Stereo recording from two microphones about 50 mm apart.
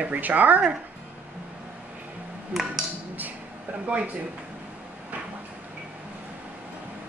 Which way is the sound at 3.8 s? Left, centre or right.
Right.